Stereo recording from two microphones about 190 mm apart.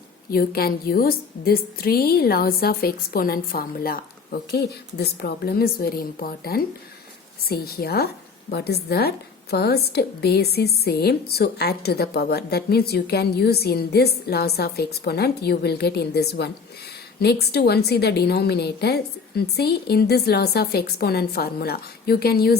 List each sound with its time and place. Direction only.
0.3 s a woman's voice: 50° left (ahead or behind)